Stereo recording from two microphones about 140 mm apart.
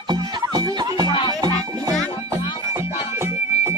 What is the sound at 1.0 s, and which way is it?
Music, 35° left (ahead or behind).